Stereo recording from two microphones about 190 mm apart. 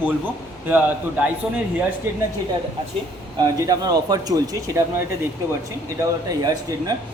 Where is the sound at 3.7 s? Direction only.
20° right (ahead or behind).